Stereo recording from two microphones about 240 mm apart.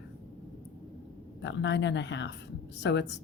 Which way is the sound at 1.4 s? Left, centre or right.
Left.